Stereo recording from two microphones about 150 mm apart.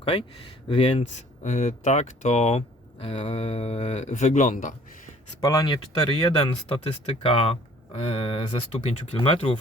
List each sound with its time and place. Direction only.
0.0 s speech: 40° left (ahead or behind)
1.4 s speech: 50° left (ahead or behind)
4.1 s a man's voice: 55° left (ahead or behind)
5.4 s speech: 20° left (ahead or behind)
6.0 s speech: 35° left (ahead or behind)